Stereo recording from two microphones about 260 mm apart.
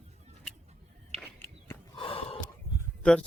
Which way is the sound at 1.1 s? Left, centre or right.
Right.